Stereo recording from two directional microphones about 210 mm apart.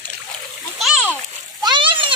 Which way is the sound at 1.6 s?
25° right (ahead or behind).